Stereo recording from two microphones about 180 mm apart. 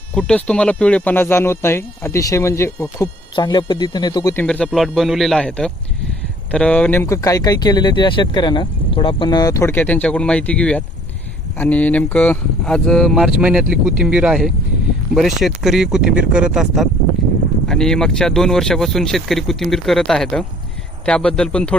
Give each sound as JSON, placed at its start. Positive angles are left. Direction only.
{"t": 0.1, "sound": "speech", "side_deg": 5}
{"t": 3.3, "sound": "speech", "side_deg": 25}
{"t": 4.4, "sound": "speech", "side_deg": 5}